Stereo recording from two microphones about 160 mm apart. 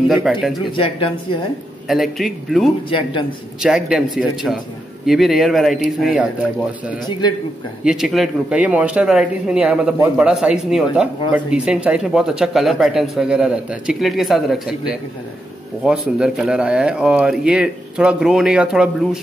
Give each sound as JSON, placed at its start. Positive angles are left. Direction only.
{"t": 0.1, "sound": "speech", "side_deg": 0}
{"t": 0.7, "sound": "speech", "side_deg": 35}
{"t": 1.9, "sound": "speech", "side_deg": 0}
{"t": 2.9, "sound": "speech", "side_deg": 30}
{"t": 3.6, "sound": "speech", "side_deg": -5}
{"t": 7.1, "sound": "a man's voice", "side_deg": 30}
{"t": 7.8, "sound": "speech", "side_deg": -5}